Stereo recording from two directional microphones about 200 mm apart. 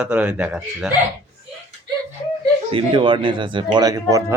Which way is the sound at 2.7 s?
25° right (ahead or behind).